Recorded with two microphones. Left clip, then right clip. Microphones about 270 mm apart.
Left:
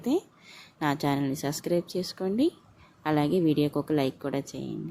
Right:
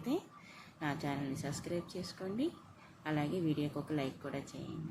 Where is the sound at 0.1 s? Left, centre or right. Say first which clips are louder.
Left 10 dB; left.